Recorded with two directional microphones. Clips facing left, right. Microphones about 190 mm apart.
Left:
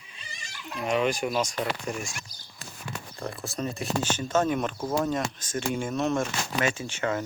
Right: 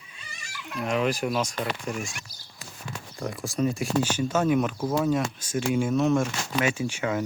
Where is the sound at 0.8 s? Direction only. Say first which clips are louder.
Even; centre (ahead or behind).